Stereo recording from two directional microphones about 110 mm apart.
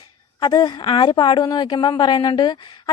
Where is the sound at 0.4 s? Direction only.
40° left (ahead or behind).